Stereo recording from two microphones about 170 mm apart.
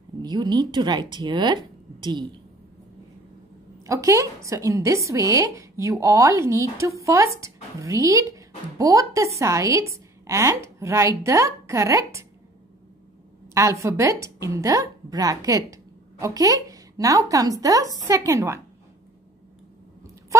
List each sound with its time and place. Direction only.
0.2 s speech: 25° right (ahead or behind)
3.8 s a woman's voice: 20° right (ahead or behind)
13.5 s a woman's voice: 15° right (ahead or behind)